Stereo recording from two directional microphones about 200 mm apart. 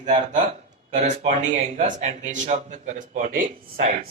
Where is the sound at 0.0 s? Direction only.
40° right (ahead or behind).